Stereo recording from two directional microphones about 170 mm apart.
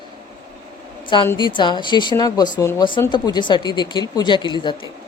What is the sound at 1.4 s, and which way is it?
Speech, 25° left (ahead or behind).